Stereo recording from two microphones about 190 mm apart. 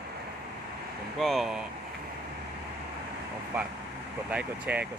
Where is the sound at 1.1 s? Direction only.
Centre (ahead or behind).